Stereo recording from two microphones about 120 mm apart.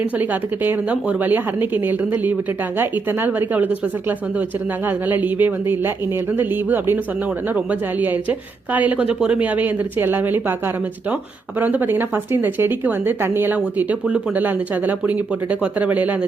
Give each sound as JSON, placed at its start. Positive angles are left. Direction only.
{"t": 0.2, "sound": "a woman's voice", "side_deg": -15}
{"t": 4.9, "sound": "a woman's voice", "side_deg": -15}
{"t": 11.6, "sound": "a woman's voice", "side_deg": -15}